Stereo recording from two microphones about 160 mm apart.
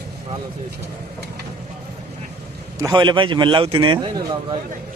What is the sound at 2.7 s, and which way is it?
A man's voice, 25° right (ahead or behind).